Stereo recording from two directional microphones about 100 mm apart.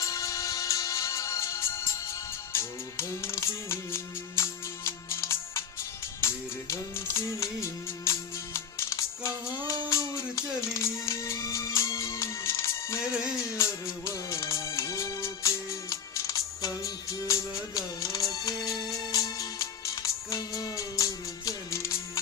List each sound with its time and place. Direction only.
0.0 s music: 35° left (ahead or behind)